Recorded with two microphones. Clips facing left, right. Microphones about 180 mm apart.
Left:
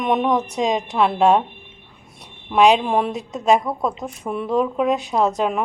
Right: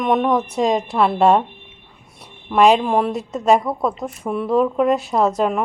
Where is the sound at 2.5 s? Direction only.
Centre (ahead or behind).